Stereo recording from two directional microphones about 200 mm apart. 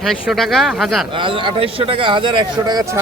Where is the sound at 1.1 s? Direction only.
25° right (ahead or behind).